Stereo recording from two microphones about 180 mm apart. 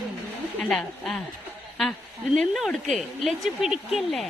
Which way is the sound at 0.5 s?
5° left (ahead or behind).